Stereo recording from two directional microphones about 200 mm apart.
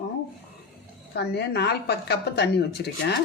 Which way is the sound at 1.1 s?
55° left (ahead or behind).